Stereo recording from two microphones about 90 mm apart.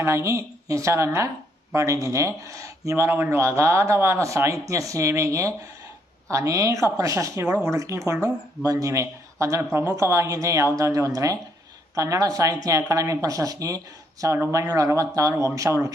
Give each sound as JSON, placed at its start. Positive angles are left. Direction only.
{"t": 0.0, "sound": "speech", "side_deg": -30}